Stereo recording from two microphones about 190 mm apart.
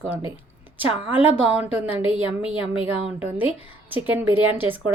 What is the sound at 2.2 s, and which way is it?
Speech, 25° left (ahead or behind).